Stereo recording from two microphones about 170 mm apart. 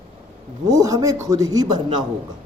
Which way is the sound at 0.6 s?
20° right (ahead or behind).